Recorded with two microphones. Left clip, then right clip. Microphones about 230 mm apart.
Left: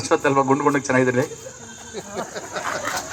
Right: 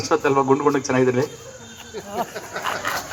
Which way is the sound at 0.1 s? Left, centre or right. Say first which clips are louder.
Even; right.